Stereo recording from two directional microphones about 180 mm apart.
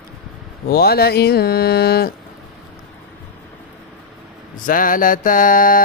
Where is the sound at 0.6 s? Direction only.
60° left (ahead or behind).